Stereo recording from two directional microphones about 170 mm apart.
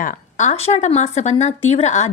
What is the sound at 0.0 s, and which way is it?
Speech, 50° left (ahead or behind).